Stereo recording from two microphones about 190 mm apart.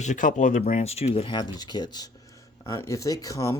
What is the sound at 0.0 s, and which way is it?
Speech, 40° left (ahead or behind).